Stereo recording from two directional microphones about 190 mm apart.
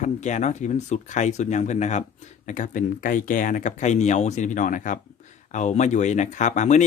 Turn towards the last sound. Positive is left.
turn(degrees=40)  # may be behind; listen again after turning